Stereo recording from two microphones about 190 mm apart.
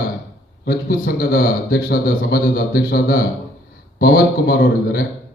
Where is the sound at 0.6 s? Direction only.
50° left (ahead or behind).